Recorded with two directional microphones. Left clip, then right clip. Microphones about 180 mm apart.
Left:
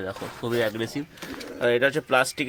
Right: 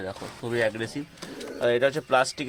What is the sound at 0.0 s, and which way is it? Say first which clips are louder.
Speech: left 3 dB; 20° left (ahead or behind).